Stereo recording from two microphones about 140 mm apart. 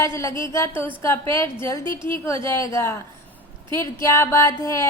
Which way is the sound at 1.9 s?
35° right (ahead or behind).